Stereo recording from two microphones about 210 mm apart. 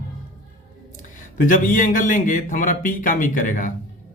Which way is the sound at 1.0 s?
40° left (ahead or behind).